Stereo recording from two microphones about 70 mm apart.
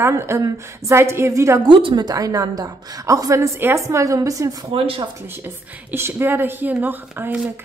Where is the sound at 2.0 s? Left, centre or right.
Right.